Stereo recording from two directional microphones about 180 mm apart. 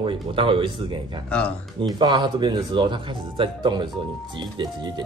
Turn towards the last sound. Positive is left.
turn(degrees=-25)  # may be behind; listen again after turning